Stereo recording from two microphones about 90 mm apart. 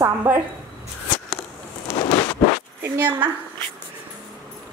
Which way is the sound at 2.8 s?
20° right (ahead or behind).